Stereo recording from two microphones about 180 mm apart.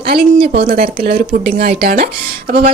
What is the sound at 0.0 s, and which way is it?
A woman's voice, 60° right (ahead or behind).